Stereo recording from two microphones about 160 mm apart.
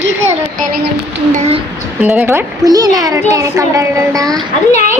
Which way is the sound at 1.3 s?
45° right (ahead or behind).